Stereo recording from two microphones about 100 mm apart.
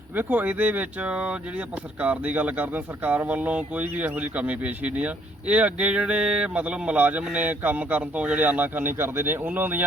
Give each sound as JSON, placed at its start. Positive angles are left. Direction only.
{"t": 0.2, "sound": "speech", "side_deg": -20}